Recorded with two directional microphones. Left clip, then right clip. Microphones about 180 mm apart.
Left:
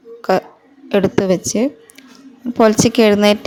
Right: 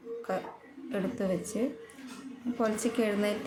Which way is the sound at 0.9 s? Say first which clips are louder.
Left 18 dB; 55° left (ahead or behind).